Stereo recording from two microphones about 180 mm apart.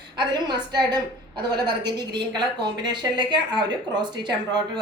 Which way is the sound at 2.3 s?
25° right (ahead or behind).